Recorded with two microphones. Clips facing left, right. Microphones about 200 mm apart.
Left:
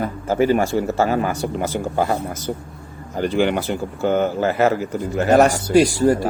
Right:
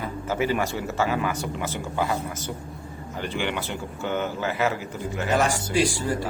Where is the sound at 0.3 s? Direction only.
40° left (ahead or behind).